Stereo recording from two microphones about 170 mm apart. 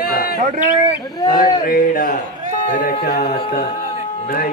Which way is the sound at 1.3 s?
55° left (ahead or behind).